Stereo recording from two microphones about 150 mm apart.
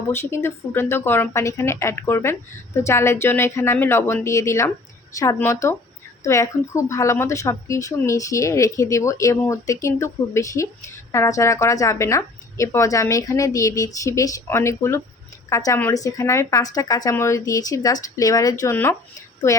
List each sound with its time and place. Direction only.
0.1 s a woman's voice: 15° left (ahead or behind)